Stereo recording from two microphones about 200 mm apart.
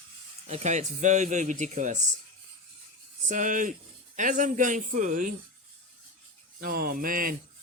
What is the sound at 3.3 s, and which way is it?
Speech, 40° right (ahead or behind).